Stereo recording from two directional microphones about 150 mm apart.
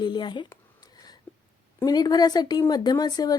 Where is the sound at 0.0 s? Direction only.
30° left (ahead or behind).